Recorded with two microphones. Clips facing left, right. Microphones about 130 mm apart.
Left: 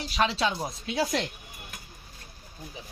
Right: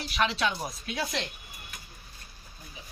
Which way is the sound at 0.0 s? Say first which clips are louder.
Left 2 dB; 30° left (ahead or behind).